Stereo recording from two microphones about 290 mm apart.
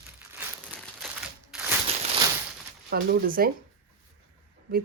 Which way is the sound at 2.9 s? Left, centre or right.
Right.